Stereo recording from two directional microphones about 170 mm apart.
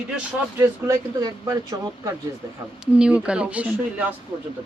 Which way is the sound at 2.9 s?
5° right (ahead or behind).